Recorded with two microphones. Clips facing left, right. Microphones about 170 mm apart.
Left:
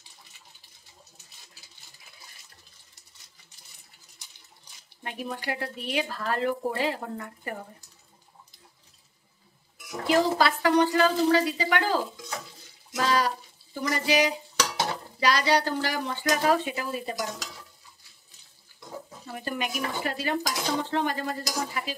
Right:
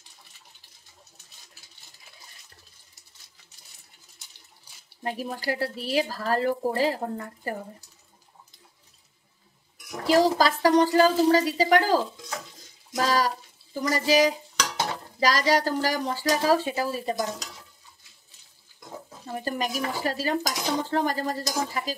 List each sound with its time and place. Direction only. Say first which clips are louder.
5.0 s dishes: right 4 dB; 35° right (ahead or behind)
10.0 s dishes: right 2 dB; 35° right (ahead or behind)
12.9 s bathtub: right 1 dB; 40° right (ahead or behind)
13.7 s dishes: right 3 dB; 40° right (ahead or behind)
19.3 s dishes: right 3 dB; 35° right (ahead or behind)